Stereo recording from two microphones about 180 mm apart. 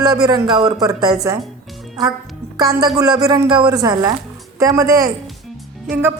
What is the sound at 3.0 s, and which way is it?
A woman's voice, 20° right (ahead or behind).